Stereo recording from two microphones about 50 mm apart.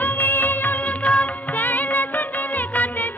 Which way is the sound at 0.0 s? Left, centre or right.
Left.